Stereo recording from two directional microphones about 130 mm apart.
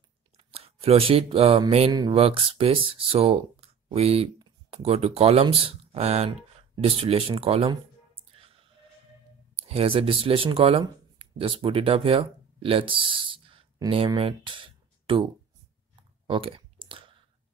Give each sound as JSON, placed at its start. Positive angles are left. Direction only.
{"t": 0.5, "sound": "speech", "side_deg": -50}
{"t": 1.9, "sound": "speech", "side_deg": -30}
{"t": 2.1, "sound": "speech", "side_deg": -50}
{"t": 8.4, "sound": "music", "side_deg": -45}
{"t": 9.6, "sound": "speech", "side_deg": -50}
{"t": 16.0, "sound": "a sound", "side_deg": -45}